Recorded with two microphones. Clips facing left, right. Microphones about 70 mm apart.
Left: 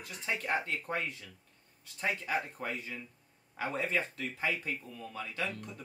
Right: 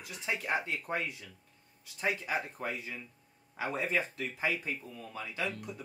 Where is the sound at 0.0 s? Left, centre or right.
Centre.